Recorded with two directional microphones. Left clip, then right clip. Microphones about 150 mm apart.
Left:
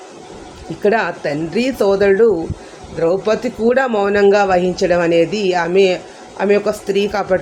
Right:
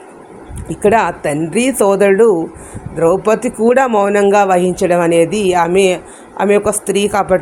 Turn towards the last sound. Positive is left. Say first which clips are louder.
# right 3 dB
turn(degrees=-45)  # may be behind; listen again after turning